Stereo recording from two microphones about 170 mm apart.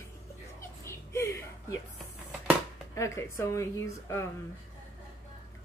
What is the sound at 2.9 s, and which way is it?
Speech, 15° left (ahead or behind).